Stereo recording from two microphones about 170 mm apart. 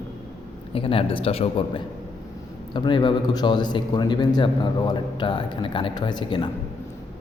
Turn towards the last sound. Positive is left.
turn(degrees=25)  # may be behind; listen again after turning